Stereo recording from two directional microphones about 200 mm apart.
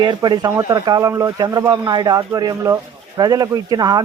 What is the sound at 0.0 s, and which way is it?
A man's voice, 20° right (ahead or behind).